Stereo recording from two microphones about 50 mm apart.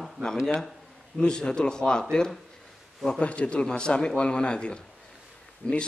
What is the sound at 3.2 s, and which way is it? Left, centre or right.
A man's voice, left.